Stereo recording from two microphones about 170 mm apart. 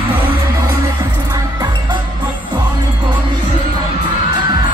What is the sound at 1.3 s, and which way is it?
Music, 20° right (ahead or behind).